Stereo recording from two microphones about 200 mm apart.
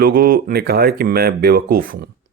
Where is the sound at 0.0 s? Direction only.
50° right (ahead or behind).